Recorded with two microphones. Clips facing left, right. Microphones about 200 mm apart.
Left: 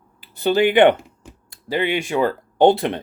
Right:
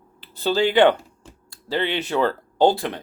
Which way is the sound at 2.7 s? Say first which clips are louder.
Left 5 dB; 25° left (ahead or behind).